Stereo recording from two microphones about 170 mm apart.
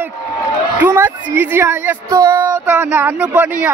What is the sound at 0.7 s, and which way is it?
A woman's voice, 10° right (ahead or behind).